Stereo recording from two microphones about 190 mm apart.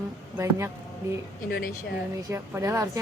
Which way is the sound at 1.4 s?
50° left (ahead or behind).